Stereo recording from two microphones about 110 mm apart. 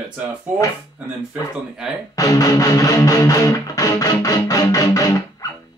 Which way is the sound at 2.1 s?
30° left (ahead or behind).